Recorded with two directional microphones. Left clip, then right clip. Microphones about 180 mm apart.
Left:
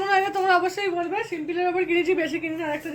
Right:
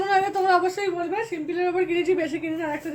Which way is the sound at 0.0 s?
10° left (ahead or behind).